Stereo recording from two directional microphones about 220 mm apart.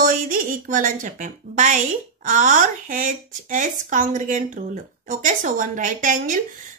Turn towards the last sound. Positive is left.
turn(degrees=-35)  # may be behind; listen again after turning